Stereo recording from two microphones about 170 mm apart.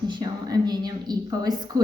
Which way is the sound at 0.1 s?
20° right (ahead or behind).